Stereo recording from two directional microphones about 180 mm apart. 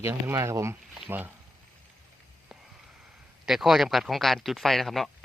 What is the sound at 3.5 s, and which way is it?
Speech, centre (ahead or behind).